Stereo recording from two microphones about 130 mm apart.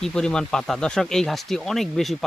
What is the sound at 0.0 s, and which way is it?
Speech, 5° left (ahead or behind).